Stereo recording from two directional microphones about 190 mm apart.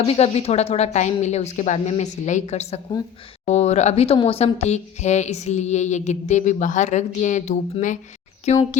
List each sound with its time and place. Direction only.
0.0 s speech: 35° left (ahead or behind)